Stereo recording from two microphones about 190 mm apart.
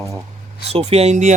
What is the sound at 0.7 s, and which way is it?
Speech, 35° right (ahead or behind).